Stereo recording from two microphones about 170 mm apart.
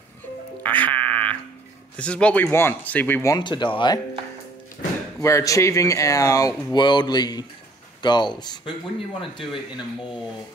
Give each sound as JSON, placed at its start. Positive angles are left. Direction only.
{"t": 0.6, "sound": "music", "side_deg": 10}
{"t": 2.0, "sound": "speech", "side_deg": 5}
{"t": 5.2, "sound": "speech", "side_deg": 20}